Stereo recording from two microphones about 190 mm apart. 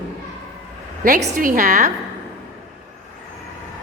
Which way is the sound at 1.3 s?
45° right (ahead or behind).